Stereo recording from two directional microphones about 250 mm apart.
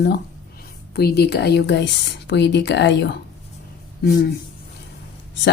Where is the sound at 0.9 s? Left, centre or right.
Left.